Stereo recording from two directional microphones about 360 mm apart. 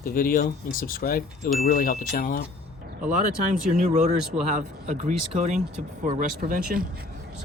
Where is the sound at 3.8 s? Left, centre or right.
Centre.